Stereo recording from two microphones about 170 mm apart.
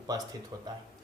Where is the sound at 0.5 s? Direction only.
20° right (ahead or behind).